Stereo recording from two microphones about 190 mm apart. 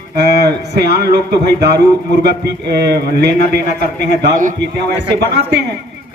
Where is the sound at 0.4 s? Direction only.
55° right (ahead or behind).